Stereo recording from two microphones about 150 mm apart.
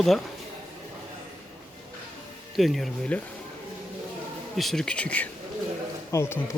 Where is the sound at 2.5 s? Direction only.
Centre (ahead or behind).